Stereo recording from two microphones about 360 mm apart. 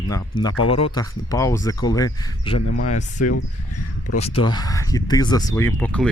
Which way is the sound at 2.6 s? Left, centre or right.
Left.